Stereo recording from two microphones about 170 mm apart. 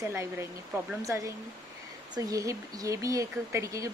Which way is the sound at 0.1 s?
15° right (ahead or behind).